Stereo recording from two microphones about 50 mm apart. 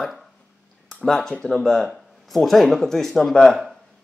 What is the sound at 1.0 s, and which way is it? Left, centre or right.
Speech, centre.